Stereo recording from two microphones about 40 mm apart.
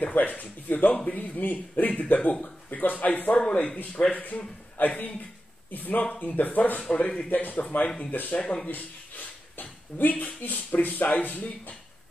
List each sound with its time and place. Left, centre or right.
0.0 s speech: left
0.9 s a man's voice: left
1.2 s speech: left
3.3 s a man's voice: left
6.0 s speech: left
6.3 s speech: left